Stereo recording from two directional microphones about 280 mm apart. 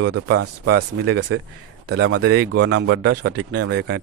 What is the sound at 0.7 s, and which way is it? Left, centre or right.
Speech, right.